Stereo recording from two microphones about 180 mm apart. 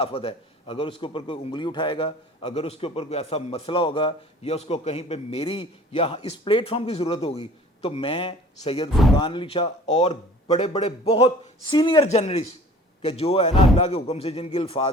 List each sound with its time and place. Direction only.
0.0 s a man's voice: 30° left (ahead or behind)
8.9 s speech: centre (ahead or behind)
9.1 s a man's voice: 25° left (ahead or behind)
12.0 s a man's voice: 40° left (ahead or behind)